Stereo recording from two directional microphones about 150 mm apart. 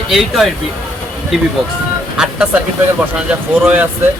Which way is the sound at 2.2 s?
5° right (ahead or behind).